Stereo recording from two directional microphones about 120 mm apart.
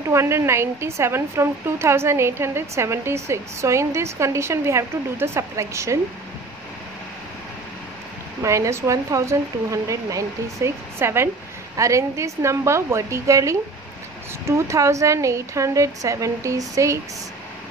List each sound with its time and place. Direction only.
0.1 s a woman's voice: 20° right (ahead or behind)
8.4 s a woman's voice: 25° right (ahead or behind)